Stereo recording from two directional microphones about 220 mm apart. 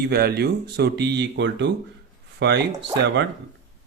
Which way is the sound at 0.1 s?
45° right (ahead or behind).